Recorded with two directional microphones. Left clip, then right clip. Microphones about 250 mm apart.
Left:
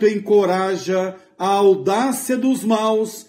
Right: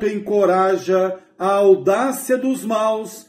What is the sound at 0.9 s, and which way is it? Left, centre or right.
Mantra, left.